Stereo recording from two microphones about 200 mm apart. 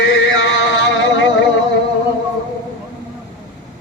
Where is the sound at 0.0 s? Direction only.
60° left (ahead or behind).